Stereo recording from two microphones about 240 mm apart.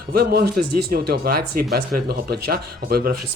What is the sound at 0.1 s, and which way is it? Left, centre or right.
Speech, right.